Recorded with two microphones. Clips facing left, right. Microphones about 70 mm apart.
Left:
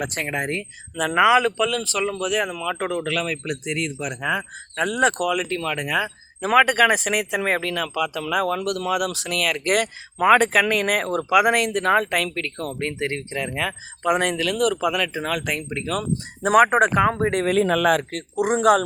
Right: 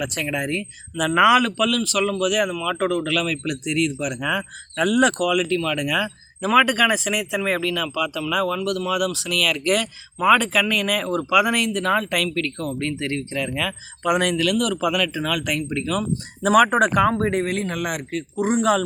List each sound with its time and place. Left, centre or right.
0.0 s speech: left
1.1 s a man's voice: left
18.1 s speech: left